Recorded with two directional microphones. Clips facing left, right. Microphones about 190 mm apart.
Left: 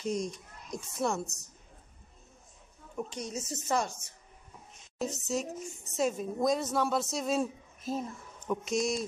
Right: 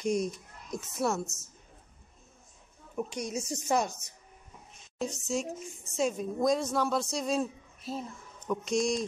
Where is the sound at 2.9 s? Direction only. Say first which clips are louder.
Right 3 dB; 10° right (ahead or behind).